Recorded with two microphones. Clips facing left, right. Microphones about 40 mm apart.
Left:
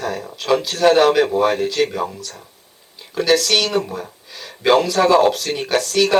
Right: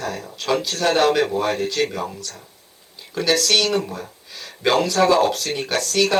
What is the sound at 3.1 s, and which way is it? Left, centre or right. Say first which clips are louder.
Speech: left 3 dB; centre.